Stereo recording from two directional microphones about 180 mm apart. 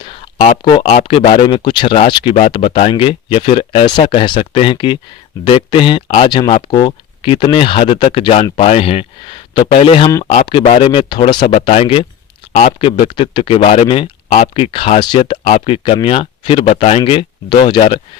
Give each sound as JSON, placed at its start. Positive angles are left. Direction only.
{"t": 1.0, "sound": "speech", "side_deg": 30}